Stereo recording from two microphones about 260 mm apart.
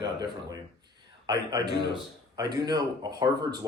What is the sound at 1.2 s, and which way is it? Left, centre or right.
Speech, centre.